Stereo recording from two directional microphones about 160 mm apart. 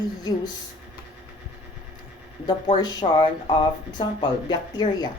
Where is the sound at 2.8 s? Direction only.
25° left (ahead or behind).